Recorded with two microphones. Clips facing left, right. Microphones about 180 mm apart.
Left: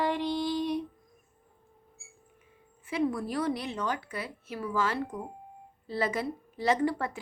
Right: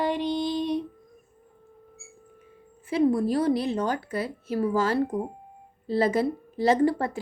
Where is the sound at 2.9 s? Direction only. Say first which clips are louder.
Right 7 dB; 30° right (ahead or behind).